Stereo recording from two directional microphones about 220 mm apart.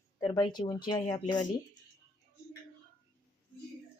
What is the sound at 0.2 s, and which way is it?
Speech, 20° left (ahead or behind).